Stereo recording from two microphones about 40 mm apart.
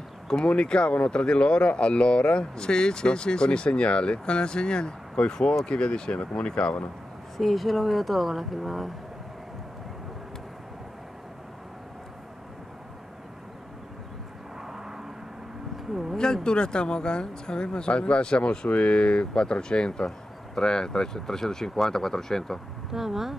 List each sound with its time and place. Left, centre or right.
0.5 s speech: left
7.3 s speech: centre
15.9 s a sound: centre
16.4 s speech: left
22.9 s speech: centre